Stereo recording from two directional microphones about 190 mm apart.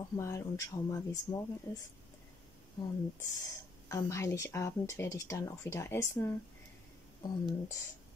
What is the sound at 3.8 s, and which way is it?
Speech, 15° left (ahead or behind).